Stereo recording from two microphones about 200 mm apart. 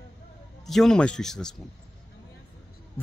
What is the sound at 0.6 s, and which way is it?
Speech, centre (ahead or behind).